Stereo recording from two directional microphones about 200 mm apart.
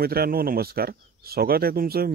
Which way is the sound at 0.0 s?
50° right (ahead or behind).